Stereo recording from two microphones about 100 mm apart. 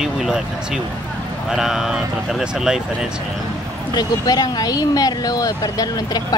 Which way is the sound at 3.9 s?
40° left (ahead or behind).